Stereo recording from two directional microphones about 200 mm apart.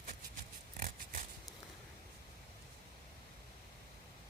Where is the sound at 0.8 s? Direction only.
40° right (ahead or behind).